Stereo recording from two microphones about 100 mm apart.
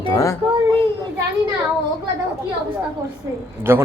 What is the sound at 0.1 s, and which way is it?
Speech, 35° left (ahead or behind).